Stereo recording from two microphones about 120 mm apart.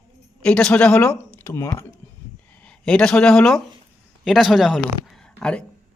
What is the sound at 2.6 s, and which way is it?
Speech, 10° left (ahead or behind).